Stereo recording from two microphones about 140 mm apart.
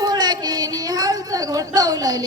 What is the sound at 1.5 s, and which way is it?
Speech, 25° right (ahead or behind).